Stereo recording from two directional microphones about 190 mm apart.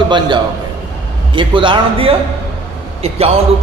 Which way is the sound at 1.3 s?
25° right (ahead or behind).